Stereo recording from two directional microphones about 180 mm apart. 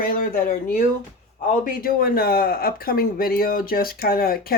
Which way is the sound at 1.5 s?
50° left (ahead or behind).